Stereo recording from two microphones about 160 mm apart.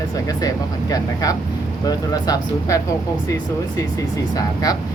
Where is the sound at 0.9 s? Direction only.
20° left (ahead or behind).